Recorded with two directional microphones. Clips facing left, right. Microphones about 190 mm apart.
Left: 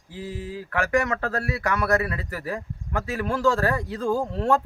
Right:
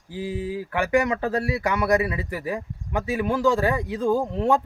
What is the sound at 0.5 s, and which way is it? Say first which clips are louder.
A man's voice: right 1 dB; 20° right (ahead or behind).